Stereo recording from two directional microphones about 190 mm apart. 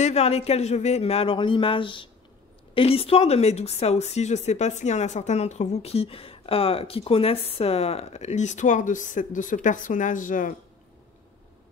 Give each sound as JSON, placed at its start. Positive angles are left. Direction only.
{"t": 0.0, "sound": "speech", "side_deg": 35}